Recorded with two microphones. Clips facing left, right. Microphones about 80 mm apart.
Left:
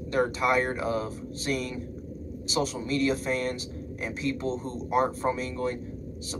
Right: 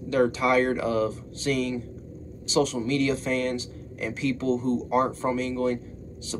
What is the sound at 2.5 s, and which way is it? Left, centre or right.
Speech, centre.